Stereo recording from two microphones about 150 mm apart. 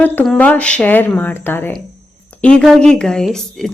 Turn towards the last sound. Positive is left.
turn(degrees=5)  # may be behind; listen again after turning